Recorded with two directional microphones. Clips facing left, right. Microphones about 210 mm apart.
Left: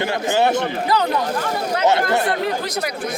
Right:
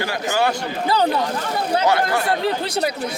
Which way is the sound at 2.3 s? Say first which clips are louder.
Even; 30° right (ahead or behind).